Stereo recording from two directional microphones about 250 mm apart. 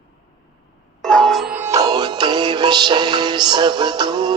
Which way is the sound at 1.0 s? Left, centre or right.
Centre.